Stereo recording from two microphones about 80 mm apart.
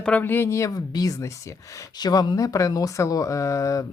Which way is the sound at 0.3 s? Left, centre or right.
Left.